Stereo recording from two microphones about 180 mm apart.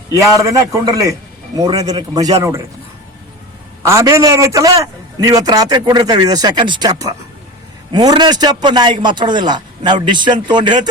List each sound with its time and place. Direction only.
0.1 s a man's voice: 15° right (ahead or behind)
3.8 s a man's voice: 15° right (ahead or behind)